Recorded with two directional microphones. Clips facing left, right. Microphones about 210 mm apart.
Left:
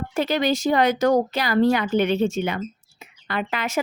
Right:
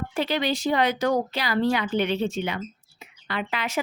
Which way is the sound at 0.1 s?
45° left (ahead or behind).